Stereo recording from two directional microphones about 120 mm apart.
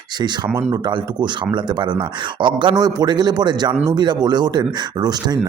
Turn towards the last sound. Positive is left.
turn(degrees=-35)  # may be behind; listen again after turning